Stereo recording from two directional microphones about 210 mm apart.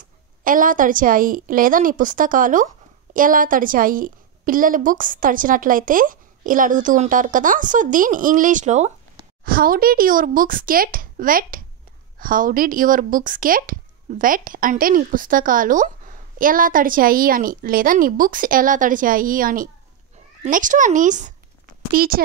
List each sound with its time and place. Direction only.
0.4 s a woman's voice: 40° right (ahead or behind)